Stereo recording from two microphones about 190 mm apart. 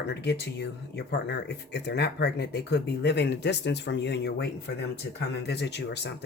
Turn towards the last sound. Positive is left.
turn(degrees=65)  # may be behind; listen again after turning